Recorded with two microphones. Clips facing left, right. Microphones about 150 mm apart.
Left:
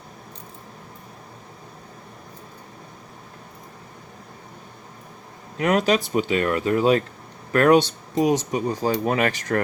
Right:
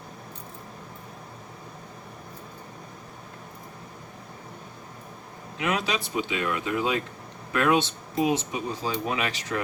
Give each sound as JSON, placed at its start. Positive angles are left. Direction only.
{"t": 5.5, "sound": "speech", "side_deg": 45}